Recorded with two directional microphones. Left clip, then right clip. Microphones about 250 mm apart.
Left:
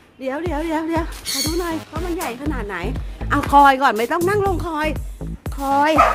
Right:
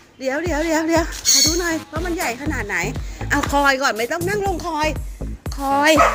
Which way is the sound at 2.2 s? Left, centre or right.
Centre.